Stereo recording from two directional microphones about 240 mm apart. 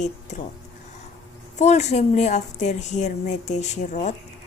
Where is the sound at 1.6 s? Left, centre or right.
Left.